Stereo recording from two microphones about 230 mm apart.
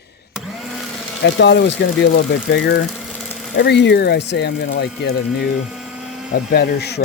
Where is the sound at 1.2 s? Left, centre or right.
Left.